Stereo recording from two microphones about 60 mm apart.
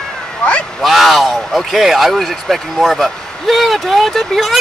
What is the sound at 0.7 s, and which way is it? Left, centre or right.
Speech, centre.